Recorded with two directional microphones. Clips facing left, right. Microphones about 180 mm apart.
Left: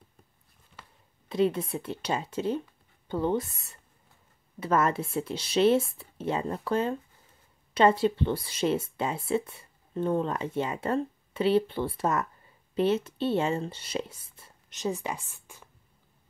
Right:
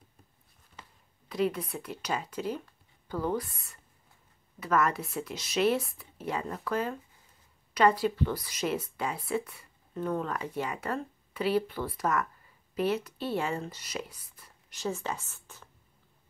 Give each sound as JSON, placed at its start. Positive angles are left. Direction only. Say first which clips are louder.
{"t": 1.3, "sound": "speech", "louder": "left 4 dB", "side_deg": 25}